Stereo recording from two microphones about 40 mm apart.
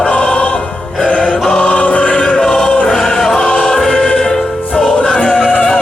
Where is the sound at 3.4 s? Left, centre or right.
Left.